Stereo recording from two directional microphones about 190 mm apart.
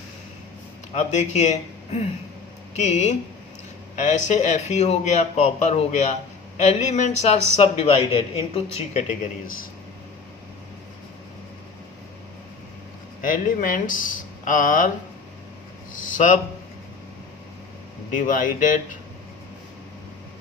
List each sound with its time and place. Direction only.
0.9 s speech: 35° left (ahead or behind)
13.2 s speech: 45° left (ahead or behind)
15.9 s speech: 45° left (ahead or behind)
18.1 s speech: 45° left (ahead or behind)